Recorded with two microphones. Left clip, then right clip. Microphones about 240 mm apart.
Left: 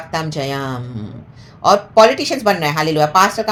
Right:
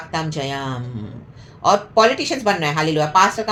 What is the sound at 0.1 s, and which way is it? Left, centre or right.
Speech, left.